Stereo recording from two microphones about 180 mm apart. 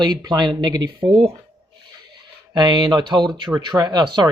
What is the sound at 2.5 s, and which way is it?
Speech, 25° right (ahead or behind).